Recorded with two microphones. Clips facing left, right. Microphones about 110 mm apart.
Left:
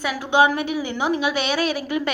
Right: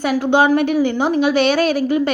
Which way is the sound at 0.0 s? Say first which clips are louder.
Right 4 dB; 45° right (ahead or behind).